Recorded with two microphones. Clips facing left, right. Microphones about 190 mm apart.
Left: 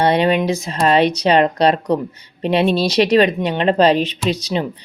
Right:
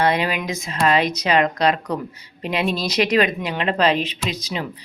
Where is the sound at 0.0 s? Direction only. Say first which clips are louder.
Left 6 dB; 30° left (ahead or behind).